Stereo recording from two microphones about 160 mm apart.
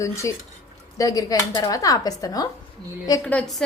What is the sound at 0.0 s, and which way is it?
Speech, 20° left (ahead or behind).